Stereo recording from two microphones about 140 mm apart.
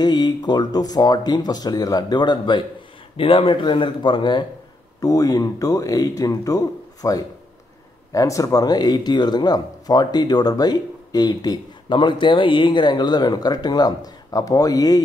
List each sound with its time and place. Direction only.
0.0 s speech: 30° left (ahead or behind)